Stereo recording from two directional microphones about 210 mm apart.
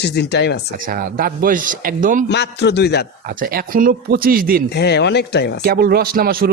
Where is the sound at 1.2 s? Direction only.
40° right (ahead or behind).